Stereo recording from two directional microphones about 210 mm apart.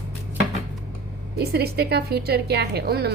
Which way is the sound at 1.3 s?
50° right (ahead or behind).